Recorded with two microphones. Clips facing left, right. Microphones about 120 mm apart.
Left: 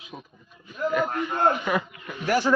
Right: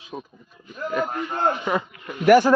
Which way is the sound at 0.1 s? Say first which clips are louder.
Right 7 dB; 35° right (ahead or behind).